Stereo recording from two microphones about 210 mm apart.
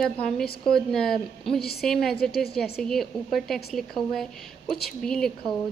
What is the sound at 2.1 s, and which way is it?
Speech, 50° left (ahead or behind).